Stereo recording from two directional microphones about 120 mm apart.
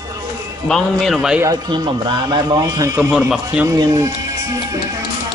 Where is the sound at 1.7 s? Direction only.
40° right (ahead or behind).